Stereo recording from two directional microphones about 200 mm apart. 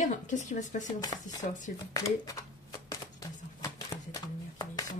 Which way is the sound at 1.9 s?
15° left (ahead or behind).